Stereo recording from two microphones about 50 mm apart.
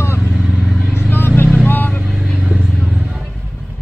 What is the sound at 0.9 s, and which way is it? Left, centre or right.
Vehicle, left.